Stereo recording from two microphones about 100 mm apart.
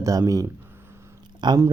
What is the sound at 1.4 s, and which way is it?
Speech, 50° right (ahead or behind).